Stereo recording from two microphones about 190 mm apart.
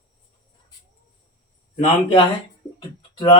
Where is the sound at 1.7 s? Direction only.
30° left (ahead or behind).